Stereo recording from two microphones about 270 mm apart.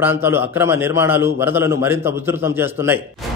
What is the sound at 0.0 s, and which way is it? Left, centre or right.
A man's voice, centre.